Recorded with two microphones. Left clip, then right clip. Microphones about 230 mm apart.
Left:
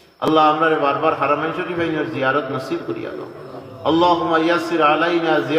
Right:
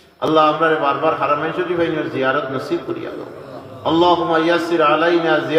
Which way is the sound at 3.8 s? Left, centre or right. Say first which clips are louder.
Right 1 dB; left.